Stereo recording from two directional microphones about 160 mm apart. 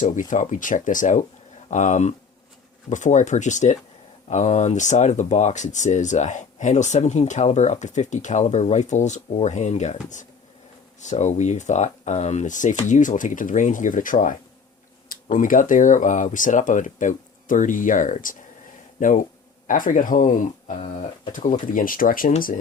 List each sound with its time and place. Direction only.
0.0 s speech: 55° left (ahead or behind)